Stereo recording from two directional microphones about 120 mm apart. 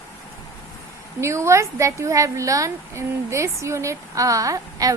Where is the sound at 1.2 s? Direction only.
25° right (ahead or behind).